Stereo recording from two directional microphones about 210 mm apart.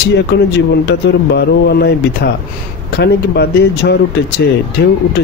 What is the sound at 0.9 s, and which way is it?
Speech, 50° left (ahead or behind).